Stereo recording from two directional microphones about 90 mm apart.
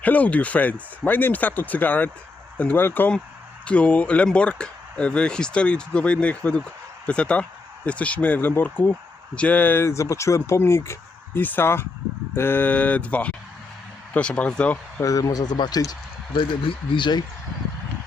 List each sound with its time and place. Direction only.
0.0 s speech: 20° left (ahead or behind)
15.0 s speech: 40° left (ahead or behind)
16.4 s speech: 70° left (ahead or behind)